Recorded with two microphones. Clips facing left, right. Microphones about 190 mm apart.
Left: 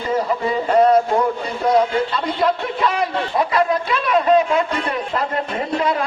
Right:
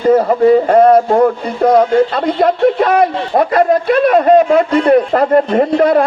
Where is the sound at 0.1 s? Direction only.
55° right (ahead or behind).